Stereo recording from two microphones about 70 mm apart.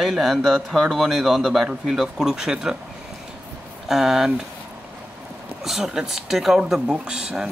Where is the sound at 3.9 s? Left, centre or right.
Centre.